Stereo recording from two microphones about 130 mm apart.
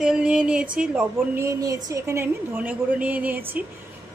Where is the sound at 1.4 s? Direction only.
25° right (ahead or behind).